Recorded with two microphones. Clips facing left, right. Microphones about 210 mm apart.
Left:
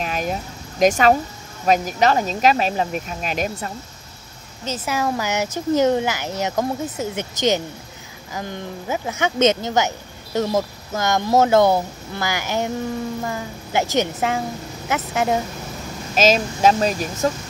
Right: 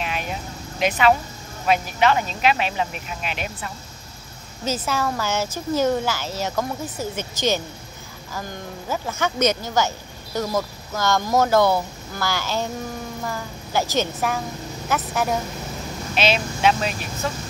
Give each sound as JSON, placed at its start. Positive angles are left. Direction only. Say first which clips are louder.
{"t": 0.0, "sound": "a sound", "louder": "left 4 dB", "side_deg": 40}
{"t": 1.7, "sound": "speech", "louder": "left 2 dB", "side_deg": 40}
{"t": 4.8, "sound": "a woman's voice", "louder": "left 5 dB", "side_deg": 15}
{"t": 16.2, "sound": "speech", "louder": "left 5 dB", "side_deg": 40}